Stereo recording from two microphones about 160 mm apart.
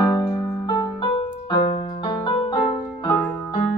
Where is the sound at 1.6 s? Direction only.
30° left (ahead or behind).